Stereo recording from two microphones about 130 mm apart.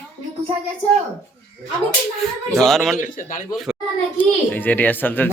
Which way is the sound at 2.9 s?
90° left.